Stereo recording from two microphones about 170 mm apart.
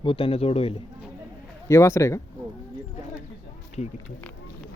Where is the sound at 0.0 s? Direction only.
30° left (ahead or behind).